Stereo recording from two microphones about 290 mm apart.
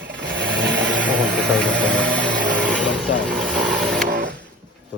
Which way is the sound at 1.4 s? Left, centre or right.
Centre.